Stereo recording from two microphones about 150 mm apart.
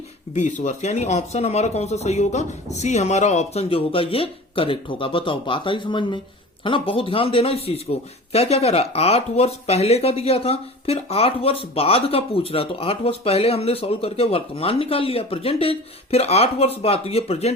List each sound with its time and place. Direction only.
0.3 s speech: 55° left (ahead or behind)